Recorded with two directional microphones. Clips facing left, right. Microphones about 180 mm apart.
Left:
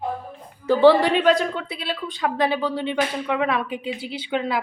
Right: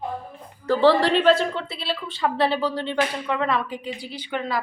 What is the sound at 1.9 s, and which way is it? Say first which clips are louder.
Speech: even; 10° left (ahead or behind).